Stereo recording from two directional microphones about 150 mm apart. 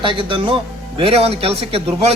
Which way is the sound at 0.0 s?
35° right (ahead or behind).